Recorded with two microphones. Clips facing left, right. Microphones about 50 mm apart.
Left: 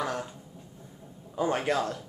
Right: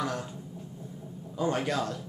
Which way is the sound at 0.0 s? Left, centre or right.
Left.